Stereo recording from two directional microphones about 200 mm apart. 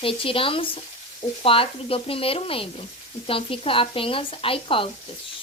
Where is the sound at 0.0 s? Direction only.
25° left (ahead or behind).